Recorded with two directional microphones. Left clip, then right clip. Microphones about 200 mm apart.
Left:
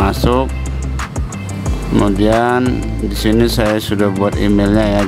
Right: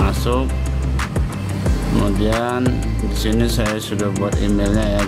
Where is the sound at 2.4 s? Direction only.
25° left (ahead or behind).